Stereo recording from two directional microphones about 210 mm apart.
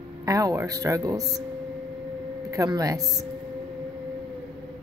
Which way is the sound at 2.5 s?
15° right (ahead or behind).